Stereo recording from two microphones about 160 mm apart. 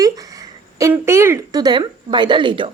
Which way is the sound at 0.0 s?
20° right (ahead or behind).